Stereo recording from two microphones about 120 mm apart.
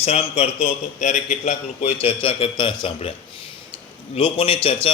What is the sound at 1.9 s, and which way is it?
A man's voice, 50° left (ahead or behind).